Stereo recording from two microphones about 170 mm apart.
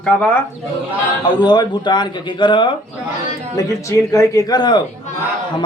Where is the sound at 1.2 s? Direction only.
25° left (ahead or behind).